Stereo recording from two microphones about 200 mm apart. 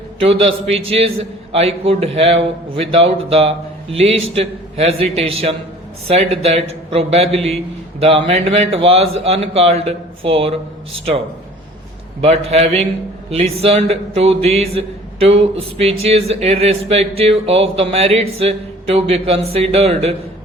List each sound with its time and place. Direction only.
0.2 s a man's voice: 30° right (ahead or behind)
12.2 s speech: 30° right (ahead or behind)